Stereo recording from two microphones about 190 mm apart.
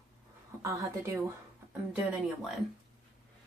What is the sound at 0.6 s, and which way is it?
Speech, 15° right (ahead or behind).